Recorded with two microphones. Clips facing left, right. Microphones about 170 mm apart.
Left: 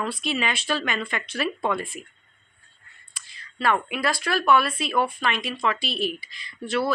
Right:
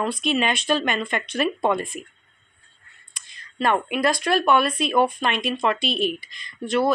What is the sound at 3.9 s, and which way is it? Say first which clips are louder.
Speech: right 5 dB; 20° right (ahead or behind).